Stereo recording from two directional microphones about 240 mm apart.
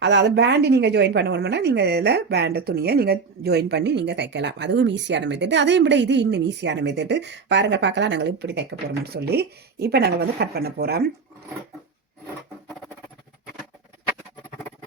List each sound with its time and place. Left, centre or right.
0.0 s a woman's voice: right